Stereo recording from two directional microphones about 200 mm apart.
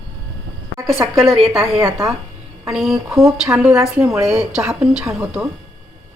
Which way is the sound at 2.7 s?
Centre (ahead or behind).